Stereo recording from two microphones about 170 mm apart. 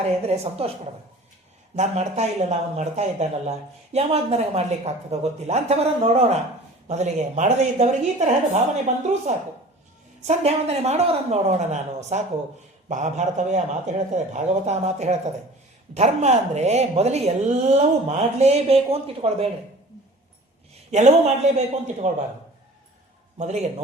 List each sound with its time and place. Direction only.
0.0 s speech: 35° right (ahead or behind)
1.7 s speech: 40° right (ahead or behind)
9.3 s speech: 45° right (ahead or behind)
20.9 s speech: 40° right (ahead or behind)
23.4 s speech: 40° right (ahead or behind)